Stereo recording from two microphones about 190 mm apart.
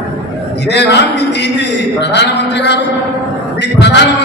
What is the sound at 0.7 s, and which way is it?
A man's voice, 65° left (ahead or behind).